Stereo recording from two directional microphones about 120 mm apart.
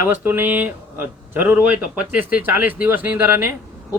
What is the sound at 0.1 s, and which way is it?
Speech, 15° right (ahead or behind).